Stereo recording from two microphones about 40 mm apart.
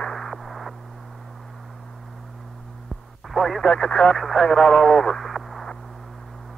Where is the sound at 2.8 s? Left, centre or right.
Centre.